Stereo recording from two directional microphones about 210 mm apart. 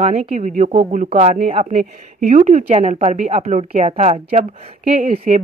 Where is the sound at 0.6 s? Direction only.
35° right (ahead or behind).